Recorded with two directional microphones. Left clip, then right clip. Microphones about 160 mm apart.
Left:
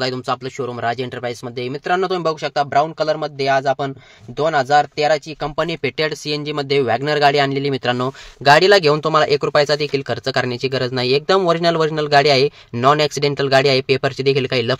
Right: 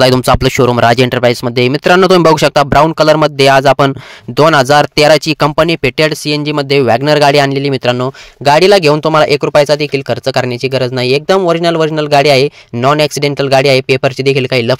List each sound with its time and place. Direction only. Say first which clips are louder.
0.0 s speech: right 13 dB; 90° right; by 8.0 s 50° right (ahead or behind)
8.0 s speech: right 5 dB; 35° right (ahead or behind)